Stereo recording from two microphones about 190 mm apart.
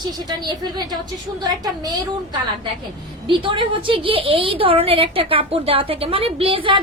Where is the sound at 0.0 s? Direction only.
20° right (ahead or behind).